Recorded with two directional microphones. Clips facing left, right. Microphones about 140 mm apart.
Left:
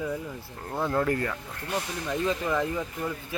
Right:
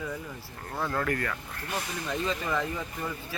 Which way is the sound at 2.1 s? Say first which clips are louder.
Left 3 dB; 10° left (ahead or behind).